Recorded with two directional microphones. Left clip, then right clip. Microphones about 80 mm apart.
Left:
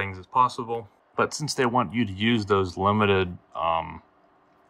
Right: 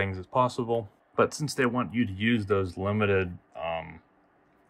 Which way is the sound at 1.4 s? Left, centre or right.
Left.